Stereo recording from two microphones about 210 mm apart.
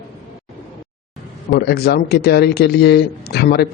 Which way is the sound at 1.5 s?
50° left (ahead or behind).